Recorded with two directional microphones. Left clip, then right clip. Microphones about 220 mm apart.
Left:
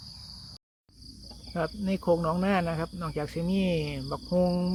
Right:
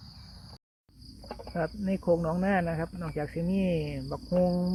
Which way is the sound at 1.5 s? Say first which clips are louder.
Left 1 dB; 20° left (ahead or behind).